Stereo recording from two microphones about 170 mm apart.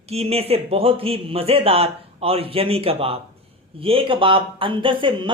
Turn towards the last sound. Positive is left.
turn(degrees=-30)  # may be behind; listen again after turning